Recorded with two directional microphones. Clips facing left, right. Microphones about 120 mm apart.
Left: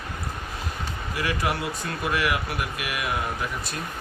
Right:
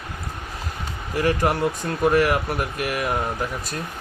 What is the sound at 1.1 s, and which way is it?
Speech, 45° right (ahead or behind).